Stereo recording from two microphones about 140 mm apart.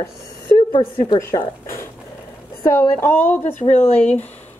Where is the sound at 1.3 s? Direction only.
35° left (ahead or behind).